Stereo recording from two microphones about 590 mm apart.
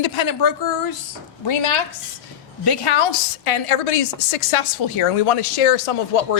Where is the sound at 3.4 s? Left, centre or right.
Left.